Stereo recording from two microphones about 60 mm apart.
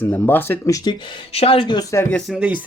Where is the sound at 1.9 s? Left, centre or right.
Left.